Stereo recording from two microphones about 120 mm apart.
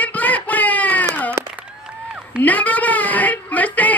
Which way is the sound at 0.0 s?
15° left (ahead or behind).